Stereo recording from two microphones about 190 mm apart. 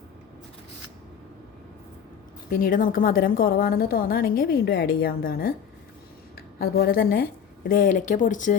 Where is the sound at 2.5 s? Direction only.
50° left (ahead or behind).